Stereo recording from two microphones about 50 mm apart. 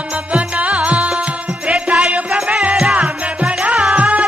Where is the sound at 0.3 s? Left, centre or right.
Right.